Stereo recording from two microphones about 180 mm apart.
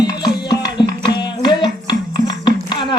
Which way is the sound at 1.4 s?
25° left (ahead or behind).